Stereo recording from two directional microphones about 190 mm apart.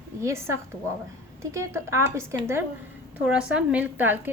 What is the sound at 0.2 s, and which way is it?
A woman's voice, 15° right (ahead or behind).